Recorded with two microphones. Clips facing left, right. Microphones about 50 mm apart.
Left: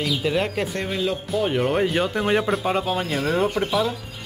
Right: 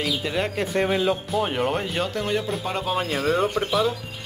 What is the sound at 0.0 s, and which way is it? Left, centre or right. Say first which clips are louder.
Speech: left 2 dB; centre.